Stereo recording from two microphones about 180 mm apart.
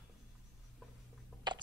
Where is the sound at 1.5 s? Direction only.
25° right (ahead or behind).